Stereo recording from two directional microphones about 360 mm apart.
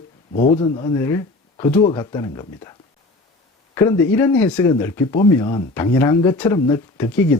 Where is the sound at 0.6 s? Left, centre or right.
Centre.